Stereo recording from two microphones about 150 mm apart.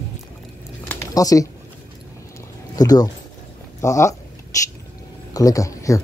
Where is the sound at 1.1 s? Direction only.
25° left (ahead or behind).